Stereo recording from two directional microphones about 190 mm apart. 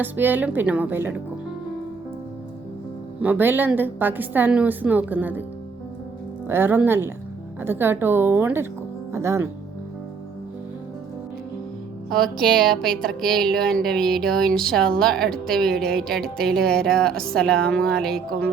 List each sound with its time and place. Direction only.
0.0 s a woman's voice: 10° right (ahead or behind)
3.2 s a woman's voice: 10° right (ahead or behind)
6.5 s a woman's voice: 10° right (ahead or behind)
12.1 s speech: centre (ahead or behind)
18.1 s speech: 55° right (ahead or behind)